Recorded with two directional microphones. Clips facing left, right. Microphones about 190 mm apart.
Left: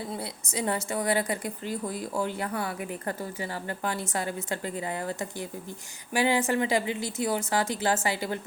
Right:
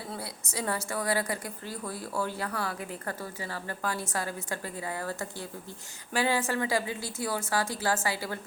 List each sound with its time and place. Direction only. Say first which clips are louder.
0.1 s a woman's voice: left 4 dB; 20° left (ahead or behind)